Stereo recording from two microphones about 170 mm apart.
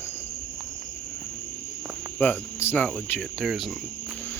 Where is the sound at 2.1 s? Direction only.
10° left (ahead or behind).